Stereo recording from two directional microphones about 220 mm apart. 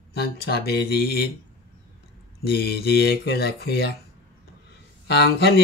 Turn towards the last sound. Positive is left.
turn(degrees=50)  # may be behind; listen again after turning